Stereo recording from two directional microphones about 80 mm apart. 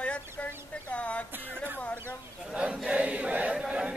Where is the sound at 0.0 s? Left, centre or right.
Centre.